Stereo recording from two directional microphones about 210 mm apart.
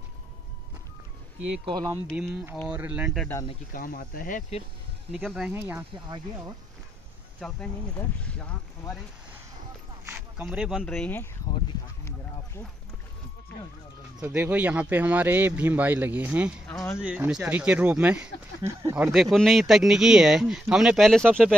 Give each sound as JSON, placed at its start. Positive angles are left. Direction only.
{"t": 1.7, "sound": "speech", "side_deg": -15}
{"t": 2.1, "sound": "speech", "side_deg": -5}
{"t": 3.7, "sound": "speech", "side_deg": 40}
{"t": 5.1, "sound": "speech", "side_deg": 0}
{"t": 6.0, "sound": "speech", "side_deg": -20}
{"t": 7.3, "sound": "speech", "side_deg": 5}
{"t": 10.1, "sound": "speech", "side_deg": -5}
{"t": 14.2, "sound": "speech", "side_deg": -10}
{"t": 19.3, "sound": "speech", "side_deg": 0}